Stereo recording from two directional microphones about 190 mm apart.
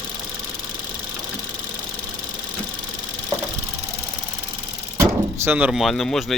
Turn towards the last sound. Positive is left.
turn(degrees=0)  # may be behind; listen again after turning